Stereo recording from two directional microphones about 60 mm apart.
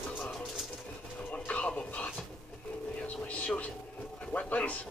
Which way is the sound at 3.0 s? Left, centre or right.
Left.